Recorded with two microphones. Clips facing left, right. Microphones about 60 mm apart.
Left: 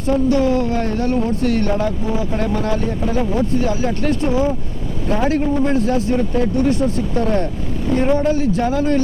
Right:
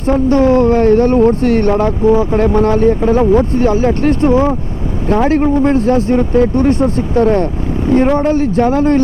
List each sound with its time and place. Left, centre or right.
0.1 s a man's voice: right